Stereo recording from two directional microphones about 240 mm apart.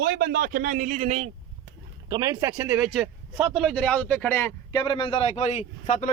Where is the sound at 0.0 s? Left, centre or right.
Right.